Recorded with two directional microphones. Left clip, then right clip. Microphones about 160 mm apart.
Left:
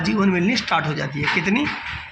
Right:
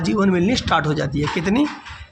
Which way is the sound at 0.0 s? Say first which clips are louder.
Right 1 dB; 90° right.